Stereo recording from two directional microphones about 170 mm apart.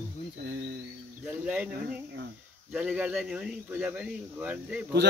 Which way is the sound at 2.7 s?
5° right (ahead or behind).